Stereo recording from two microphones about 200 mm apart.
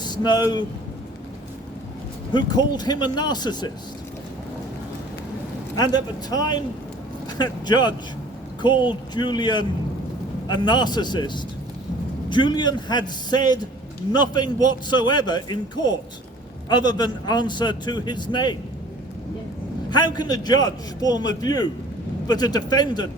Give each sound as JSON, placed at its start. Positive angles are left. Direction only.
{"t": 0.0, "sound": "vehicle", "side_deg": 20}
{"t": 2.3, "sound": "a man's voice", "side_deg": 20}
{"t": 5.7, "sound": "a man's voice", "side_deg": 20}
{"t": 20.1, "sound": "a man's voice", "side_deg": 20}